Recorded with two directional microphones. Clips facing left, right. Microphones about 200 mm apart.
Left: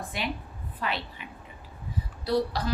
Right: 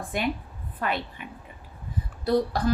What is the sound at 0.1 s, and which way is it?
A woman's voice, 50° right (ahead or behind).